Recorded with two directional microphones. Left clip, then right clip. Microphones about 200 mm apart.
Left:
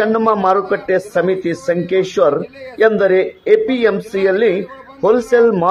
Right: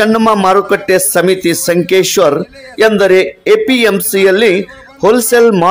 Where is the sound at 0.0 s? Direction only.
70° right (ahead or behind).